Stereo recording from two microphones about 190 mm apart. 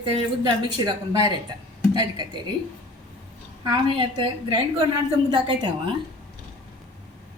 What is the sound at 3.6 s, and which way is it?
Speech, 25° right (ahead or behind).